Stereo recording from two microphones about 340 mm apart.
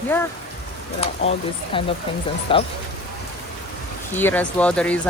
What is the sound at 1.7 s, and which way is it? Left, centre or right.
Speech, centre.